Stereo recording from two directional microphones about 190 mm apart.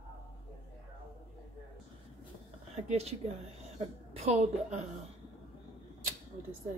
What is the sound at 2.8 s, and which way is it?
A woman's voice, 35° right (ahead or behind).